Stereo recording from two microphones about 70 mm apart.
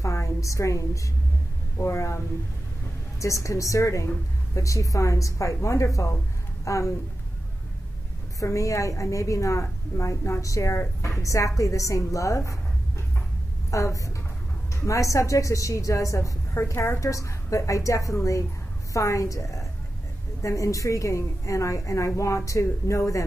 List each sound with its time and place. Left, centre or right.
0.0 s a sound: left
1.8 s a woman's voice: left
8.4 s a woman's voice: left
13.7 s a woman's voice: left
17.0 s a woman's voice: left